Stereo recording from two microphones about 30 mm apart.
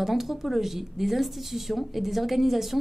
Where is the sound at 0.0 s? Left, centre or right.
Centre.